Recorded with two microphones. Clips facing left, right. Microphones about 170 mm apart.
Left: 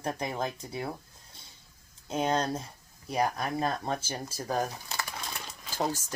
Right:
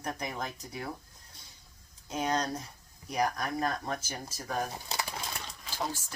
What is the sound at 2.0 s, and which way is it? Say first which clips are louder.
Speech: left 3 dB; 30° left (ahead or behind).